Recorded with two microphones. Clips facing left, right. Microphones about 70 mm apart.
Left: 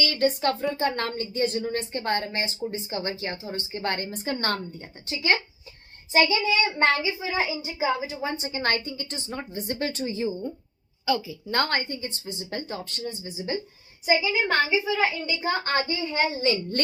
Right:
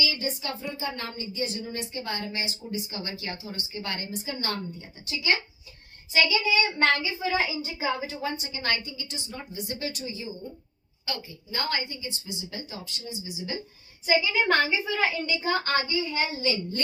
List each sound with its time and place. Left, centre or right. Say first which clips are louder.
0.0 s a woman's voice: left 7 dB; left; by 8.1 s centre
8.2 s a woman's voice: left 3 dB; left
11.5 s a woman's voice: left 5 dB; left
14.4 s a woman's voice: left 1 dB; centre
15.4 s a child's voice: left 2 dB; left